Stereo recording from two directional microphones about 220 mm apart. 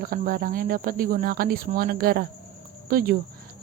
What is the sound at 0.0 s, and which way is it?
Speech, 40° right (ahead or behind).